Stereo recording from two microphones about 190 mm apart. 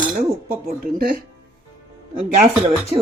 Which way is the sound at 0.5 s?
50° right (ahead or behind).